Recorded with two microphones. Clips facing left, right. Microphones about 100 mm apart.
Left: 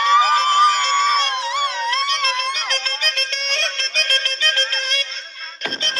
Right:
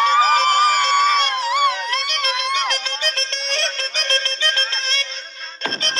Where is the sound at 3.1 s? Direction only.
30° right (ahead or behind).